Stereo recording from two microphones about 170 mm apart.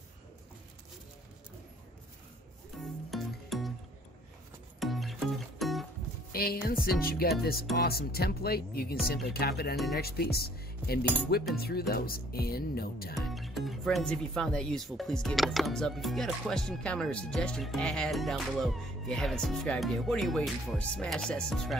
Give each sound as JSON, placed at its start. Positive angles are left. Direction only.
{"t": 2.8, "sound": "music", "side_deg": 0}
{"t": 4.7, "sound": "music", "side_deg": 0}
{"t": 6.3, "sound": "speech", "side_deg": 65}
{"t": 13.3, "sound": "speech", "side_deg": 0}